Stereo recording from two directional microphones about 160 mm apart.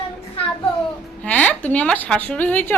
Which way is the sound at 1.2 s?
10° left (ahead or behind).